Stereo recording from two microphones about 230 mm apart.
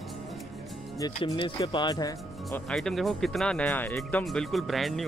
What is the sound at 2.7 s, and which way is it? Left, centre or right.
Speech, centre.